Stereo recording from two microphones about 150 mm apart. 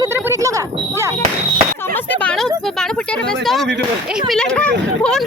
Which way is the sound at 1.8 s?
15° left (ahead or behind).